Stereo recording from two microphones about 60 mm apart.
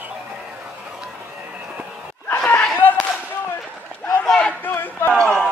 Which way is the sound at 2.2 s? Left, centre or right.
Left.